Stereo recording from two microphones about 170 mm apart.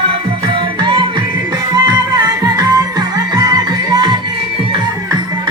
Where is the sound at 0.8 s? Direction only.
30° right (ahead or behind).